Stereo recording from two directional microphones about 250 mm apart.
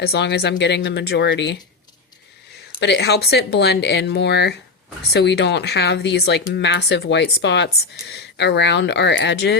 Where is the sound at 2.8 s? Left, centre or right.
Left.